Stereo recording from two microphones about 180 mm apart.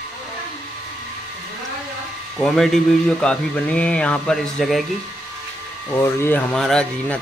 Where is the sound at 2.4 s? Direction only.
5° left (ahead or behind).